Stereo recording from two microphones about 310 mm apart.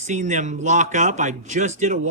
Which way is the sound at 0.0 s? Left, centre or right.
Right.